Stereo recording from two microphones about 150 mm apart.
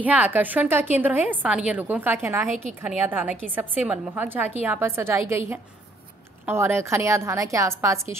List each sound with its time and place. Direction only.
0.0 s a woman's voice: 10° right (ahead or behind)
6.4 s a woman's voice: 15° right (ahead or behind)